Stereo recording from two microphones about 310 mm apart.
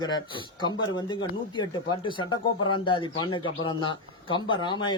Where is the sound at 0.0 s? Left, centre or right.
Centre.